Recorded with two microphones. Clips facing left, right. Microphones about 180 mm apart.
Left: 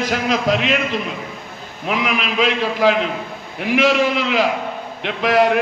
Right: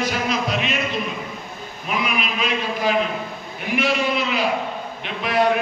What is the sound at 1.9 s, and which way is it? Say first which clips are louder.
A man's voice: left 3 dB; 90° left.